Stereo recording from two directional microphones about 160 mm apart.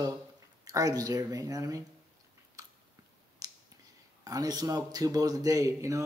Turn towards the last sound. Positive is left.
turn(degrees=-20)  # may be behind; listen again after turning